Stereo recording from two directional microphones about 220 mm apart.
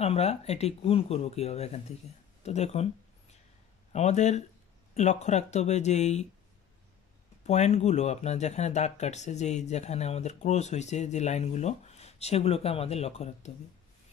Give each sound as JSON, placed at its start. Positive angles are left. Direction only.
{"t": 0.0, "sound": "speech", "side_deg": 30}
{"t": 2.4, "sound": "a sound", "side_deg": 30}
{"t": 3.9, "sound": "speech", "side_deg": 30}
{"t": 7.4, "sound": "speech", "side_deg": 30}